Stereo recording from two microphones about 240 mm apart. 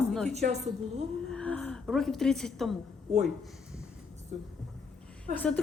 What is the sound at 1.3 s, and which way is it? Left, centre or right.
A woman's voice, centre.